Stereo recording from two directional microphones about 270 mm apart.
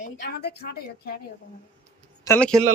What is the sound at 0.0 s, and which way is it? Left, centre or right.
A woman's voice, left.